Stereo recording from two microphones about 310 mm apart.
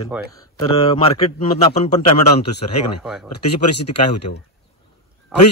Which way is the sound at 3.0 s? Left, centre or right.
Centre.